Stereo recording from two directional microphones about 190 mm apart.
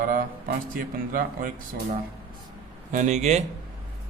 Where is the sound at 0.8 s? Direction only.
45° right (ahead or behind).